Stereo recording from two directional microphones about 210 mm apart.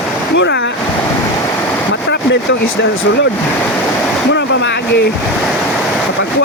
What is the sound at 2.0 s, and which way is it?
Vehicle, 60° left (ahead or behind).